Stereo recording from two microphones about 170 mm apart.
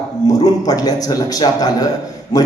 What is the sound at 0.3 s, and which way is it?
A man's voice, 20° left (ahead or behind).